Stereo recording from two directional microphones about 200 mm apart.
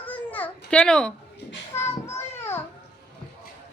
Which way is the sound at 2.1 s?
10° left (ahead or behind).